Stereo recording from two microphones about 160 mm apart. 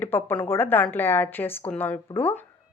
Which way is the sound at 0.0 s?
15° left (ahead or behind).